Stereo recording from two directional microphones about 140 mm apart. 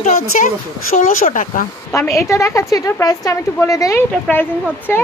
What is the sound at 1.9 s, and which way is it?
A woman's voice, 20° left (ahead or behind).